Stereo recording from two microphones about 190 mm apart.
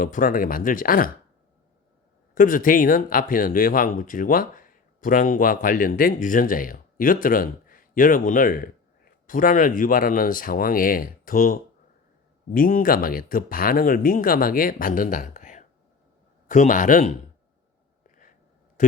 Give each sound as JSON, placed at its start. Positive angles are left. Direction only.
{"t": 0.0, "sound": "speech", "side_deg": 45}
{"t": 2.3, "sound": "speech", "side_deg": 45}
{"t": 18.0, "sound": "a sound", "side_deg": 45}